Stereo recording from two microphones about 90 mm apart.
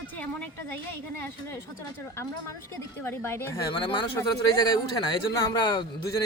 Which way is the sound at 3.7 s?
55° left (ahead or behind).